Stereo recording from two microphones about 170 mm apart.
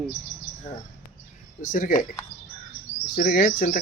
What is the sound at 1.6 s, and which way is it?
Speech, 50° left (ahead or behind).